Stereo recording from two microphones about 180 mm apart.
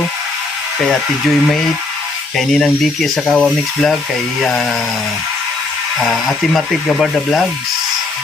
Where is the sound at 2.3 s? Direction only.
Centre (ahead or behind).